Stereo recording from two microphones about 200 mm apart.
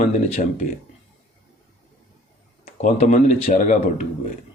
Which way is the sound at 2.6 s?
35° left (ahead or behind).